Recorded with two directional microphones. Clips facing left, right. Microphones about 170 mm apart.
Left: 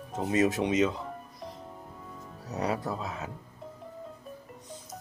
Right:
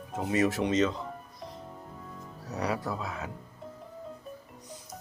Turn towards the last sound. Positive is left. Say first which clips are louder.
# even
turn(degrees=20)  # may be behind; listen again after turning